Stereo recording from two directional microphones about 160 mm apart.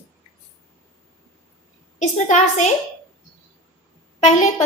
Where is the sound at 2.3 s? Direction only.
50° left (ahead or behind).